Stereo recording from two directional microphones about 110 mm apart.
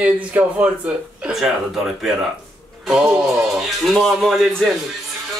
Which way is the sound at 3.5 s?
Centre (ahead or behind).